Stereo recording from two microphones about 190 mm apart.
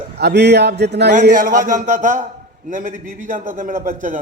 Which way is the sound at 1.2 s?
45° right (ahead or behind).